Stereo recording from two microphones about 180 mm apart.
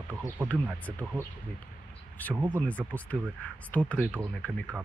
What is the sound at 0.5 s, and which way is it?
Speech, 10° left (ahead or behind).